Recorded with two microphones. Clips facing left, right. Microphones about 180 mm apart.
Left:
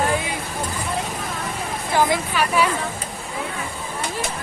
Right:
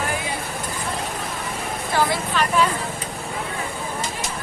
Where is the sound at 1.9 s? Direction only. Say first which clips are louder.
Left 2 dB; 15° left (ahead or behind).